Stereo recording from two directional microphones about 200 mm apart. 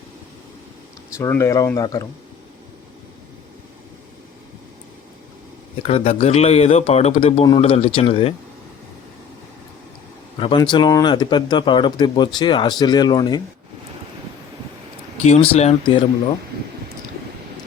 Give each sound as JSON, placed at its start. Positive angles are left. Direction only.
{"t": 1.2, "sound": "speech", "side_deg": 15}
{"t": 5.8, "sound": "speech", "side_deg": 30}
{"t": 10.4, "sound": "speech", "side_deg": 20}
{"t": 15.2, "sound": "speech", "side_deg": 30}